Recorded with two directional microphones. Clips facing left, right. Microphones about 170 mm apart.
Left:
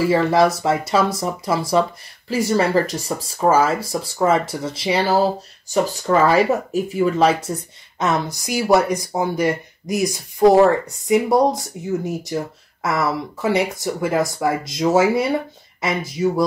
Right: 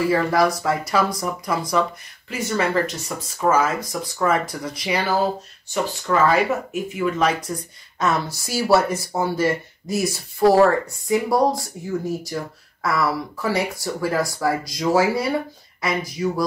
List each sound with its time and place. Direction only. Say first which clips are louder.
0.1 s speech: left 3 dB; 25° left (ahead or behind)